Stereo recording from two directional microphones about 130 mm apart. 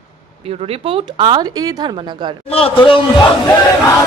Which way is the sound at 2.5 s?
45° left (ahead or behind).